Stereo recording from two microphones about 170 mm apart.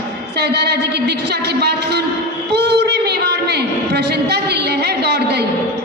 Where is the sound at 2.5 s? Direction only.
80° right.